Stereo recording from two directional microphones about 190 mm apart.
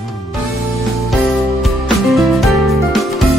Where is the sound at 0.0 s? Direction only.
Centre (ahead or behind).